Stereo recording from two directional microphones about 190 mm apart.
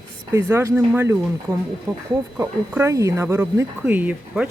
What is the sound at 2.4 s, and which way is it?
Speech, 15° right (ahead or behind).